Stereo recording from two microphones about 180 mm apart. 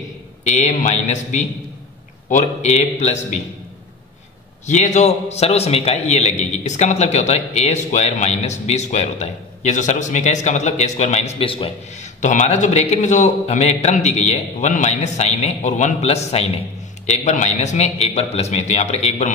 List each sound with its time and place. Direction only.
0.4 s a man's voice: 40° left (ahead or behind)
4.6 s a man's voice: 40° left (ahead or behind)